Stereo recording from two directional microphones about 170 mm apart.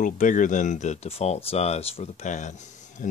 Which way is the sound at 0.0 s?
50° left (ahead or behind).